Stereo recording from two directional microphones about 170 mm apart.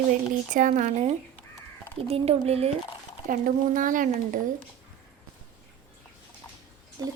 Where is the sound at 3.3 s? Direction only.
50° right (ahead or behind).